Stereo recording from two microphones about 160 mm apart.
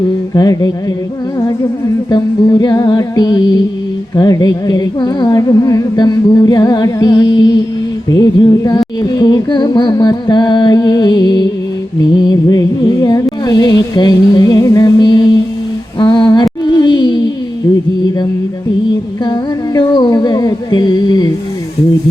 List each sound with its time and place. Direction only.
0.3 s humming: 25° left (ahead or behind)
2.0 s humming: 25° left (ahead or behind)
16.0 s a sound: 30° left (ahead or behind)
19.2 s humming: 30° left (ahead or behind)